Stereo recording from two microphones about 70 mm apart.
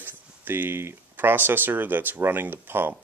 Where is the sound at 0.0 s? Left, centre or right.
Right.